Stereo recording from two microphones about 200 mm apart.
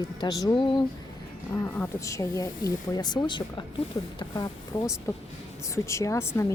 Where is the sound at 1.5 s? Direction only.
10° left (ahead or behind).